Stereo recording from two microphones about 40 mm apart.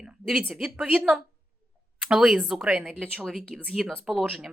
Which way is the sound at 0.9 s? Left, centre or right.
Right.